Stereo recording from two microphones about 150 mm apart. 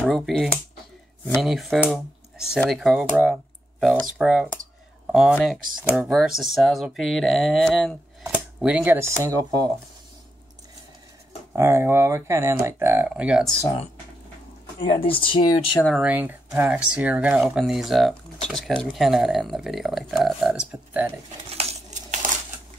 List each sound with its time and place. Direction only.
0.0 s speech: centre (ahead or behind)
5.8 s speech: 15° right (ahead or behind)
6.0 s speech: centre (ahead or behind); by 9.7 s 25° right (ahead or behind)
11.5 s speech: 15° right (ahead or behind)
14.8 s speech: 35° left (ahead or behind)
16.0 s speech: 10° right (ahead or behind)
21.5 s coin: 45° right (ahead or behind)